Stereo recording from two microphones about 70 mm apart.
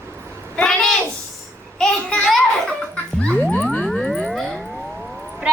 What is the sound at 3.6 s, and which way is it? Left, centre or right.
Music, centre.